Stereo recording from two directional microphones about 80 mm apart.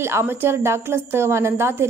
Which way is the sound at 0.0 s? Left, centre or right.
Right.